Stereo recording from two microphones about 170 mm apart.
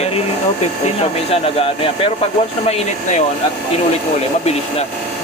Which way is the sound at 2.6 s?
40° left (ahead or behind).